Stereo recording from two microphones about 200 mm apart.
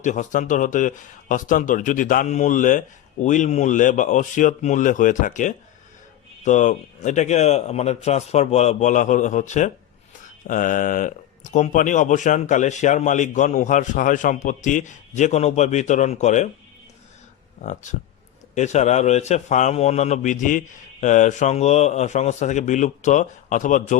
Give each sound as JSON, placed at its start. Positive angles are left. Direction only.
{"t": 0.0, "sound": "speech", "side_deg": 40}
{"t": 18.5, "sound": "speech", "side_deg": 35}